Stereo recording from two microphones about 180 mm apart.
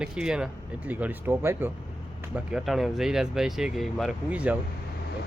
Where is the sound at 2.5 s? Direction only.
Centre (ahead or behind).